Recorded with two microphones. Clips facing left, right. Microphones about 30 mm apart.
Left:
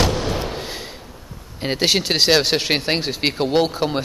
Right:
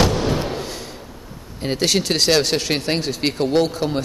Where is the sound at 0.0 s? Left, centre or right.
Centre.